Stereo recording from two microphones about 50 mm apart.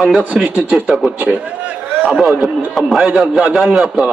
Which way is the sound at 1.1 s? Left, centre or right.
Right.